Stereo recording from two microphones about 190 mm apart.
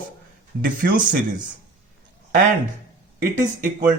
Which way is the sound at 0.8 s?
55° right (ahead or behind).